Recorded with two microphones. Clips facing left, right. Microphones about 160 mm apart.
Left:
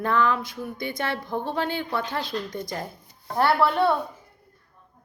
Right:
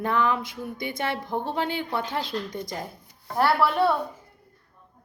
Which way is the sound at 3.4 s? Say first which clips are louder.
Left 1 dB; 5° right (ahead or behind).